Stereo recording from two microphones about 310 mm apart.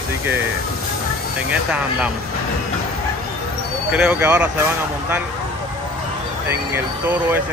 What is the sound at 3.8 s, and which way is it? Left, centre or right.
Speech, centre.